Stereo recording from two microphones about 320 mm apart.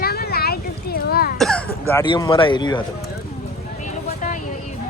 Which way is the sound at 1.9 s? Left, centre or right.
Centre.